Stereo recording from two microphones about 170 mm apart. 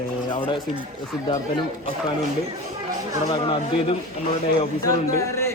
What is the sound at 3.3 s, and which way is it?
Speech, 25° left (ahead or behind).